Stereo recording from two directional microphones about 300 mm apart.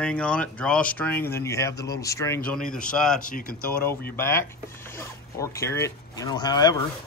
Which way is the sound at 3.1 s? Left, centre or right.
Left.